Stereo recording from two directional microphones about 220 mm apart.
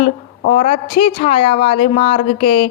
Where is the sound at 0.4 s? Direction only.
30° left (ahead or behind).